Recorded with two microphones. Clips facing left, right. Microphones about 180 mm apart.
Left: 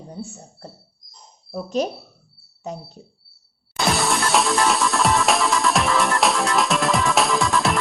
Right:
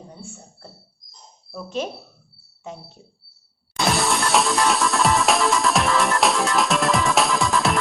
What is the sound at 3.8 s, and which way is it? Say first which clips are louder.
Music: even; centre (ahead or behind).